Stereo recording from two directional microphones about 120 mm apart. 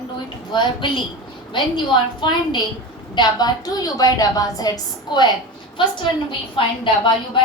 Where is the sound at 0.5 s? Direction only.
40° left (ahead or behind).